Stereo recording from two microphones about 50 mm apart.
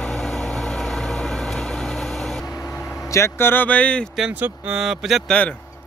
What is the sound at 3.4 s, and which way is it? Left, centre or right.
Speech, left.